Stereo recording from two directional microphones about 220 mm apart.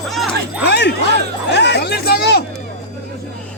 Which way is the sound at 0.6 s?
50° left (ahead or behind).